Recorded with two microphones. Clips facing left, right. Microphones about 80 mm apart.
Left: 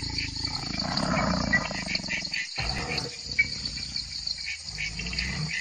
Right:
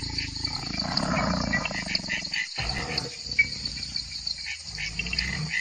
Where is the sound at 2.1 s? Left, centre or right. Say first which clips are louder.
Right 2 dB; right.